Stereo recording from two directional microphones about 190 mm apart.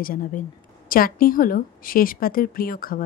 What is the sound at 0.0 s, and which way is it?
A woman's voice, 50° left (ahead or behind).